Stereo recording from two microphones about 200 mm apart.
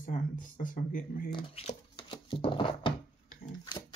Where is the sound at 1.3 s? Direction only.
30° left (ahead or behind).